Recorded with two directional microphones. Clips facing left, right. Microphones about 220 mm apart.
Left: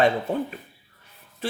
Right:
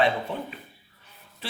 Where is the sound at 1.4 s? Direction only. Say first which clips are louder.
Left 8 dB; 50° left (ahead or behind).